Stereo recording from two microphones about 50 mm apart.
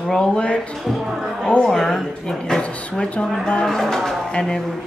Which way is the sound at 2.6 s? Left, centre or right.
Left.